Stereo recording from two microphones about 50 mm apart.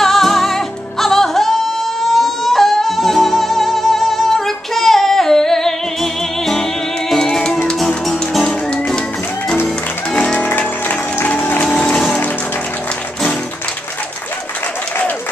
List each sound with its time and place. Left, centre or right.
0.0 s music: centre
7.1 s music: centre
10.3 s music: left